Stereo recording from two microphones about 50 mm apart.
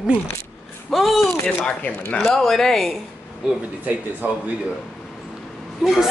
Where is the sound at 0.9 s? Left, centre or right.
Centre.